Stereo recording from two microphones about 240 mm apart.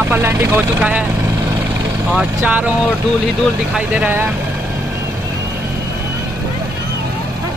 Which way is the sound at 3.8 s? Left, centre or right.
Centre.